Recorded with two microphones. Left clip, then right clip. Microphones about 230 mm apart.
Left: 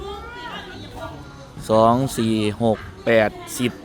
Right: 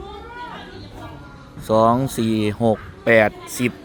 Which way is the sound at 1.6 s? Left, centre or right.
Centre.